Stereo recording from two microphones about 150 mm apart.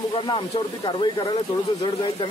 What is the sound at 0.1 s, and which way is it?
Speech, 35° left (ahead or behind).